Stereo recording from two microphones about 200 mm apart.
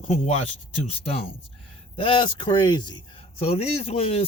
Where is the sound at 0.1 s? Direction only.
35° left (ahead or behind).